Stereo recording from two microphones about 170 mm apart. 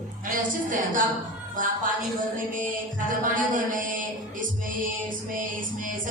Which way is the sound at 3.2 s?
50° right (ahead or behind).